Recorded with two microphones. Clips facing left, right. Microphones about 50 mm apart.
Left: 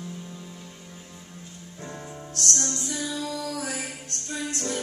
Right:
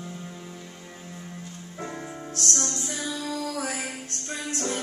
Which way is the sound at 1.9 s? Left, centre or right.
Right.